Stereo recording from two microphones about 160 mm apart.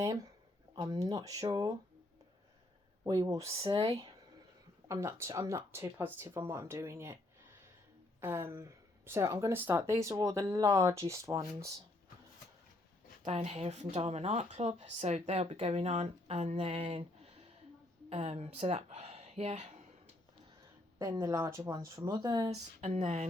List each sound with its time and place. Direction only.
0.8 s speech: 25° right (ahead or behind)
3.0 s speech: 20° right (ahead or behind)
3.5 s speech: 35° right (ahead or behind)
3.8 s speech: 25° right (ahead or behind)
8.2 s speech: 15° right (ahead or behind)
13.2 s speech: 40° right (ahead or behind)
18.1 s speech: 40° right (ahead or behind)
21.0 s speech: 20° right (ahead or behind)
22.8 s a sound: 45° right (ahead or behind)